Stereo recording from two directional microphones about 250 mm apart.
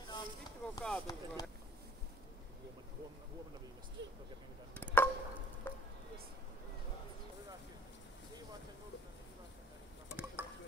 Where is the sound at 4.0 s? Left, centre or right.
Right.